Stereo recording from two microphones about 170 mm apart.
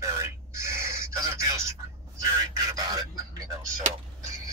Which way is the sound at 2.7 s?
20° right (ahead or behind).